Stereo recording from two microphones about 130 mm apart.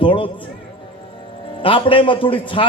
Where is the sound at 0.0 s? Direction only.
40° left (ahead or behind).